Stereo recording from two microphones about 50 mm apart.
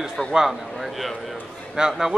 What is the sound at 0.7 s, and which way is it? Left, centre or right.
A man's voice, centre.